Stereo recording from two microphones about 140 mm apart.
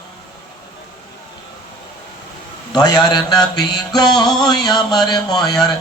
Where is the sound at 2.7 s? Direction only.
30° left (ahead or behind).